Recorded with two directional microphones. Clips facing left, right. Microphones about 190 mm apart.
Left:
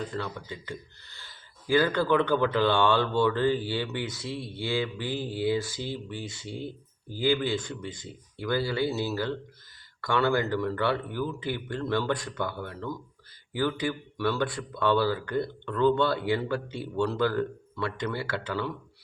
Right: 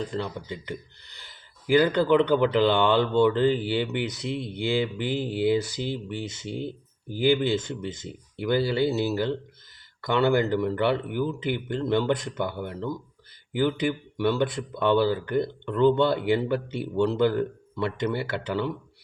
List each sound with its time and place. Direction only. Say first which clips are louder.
0.1 s speech: right 3 dB; 20° right (ahead or behind)